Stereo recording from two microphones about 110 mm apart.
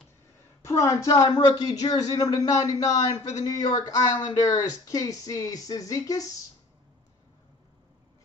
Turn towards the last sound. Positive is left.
turn(degrees=35)  # may be behind; listen again after turning